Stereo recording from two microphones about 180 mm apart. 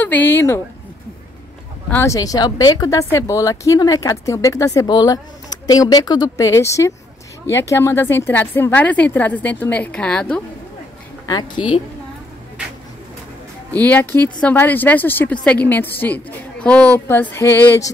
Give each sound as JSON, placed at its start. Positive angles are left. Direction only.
{"t": 0.0, "sound": "a woman's voice", "side_deg": 10}
{"t": 1.9, "sound": "a woman's voice", "side_deg": 15}
{"t": 11.2, "sound": "a woman's voice", "side_deg": 25}
{"t": 13.7, "sound": "a woman's voice", "side_deg": 10}